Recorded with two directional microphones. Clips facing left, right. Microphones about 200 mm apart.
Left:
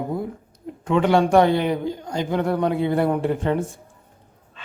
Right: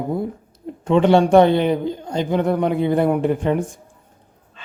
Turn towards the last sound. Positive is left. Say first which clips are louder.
# right 3 dB
turn(degrees=-15)  # may be behind; listen again after turning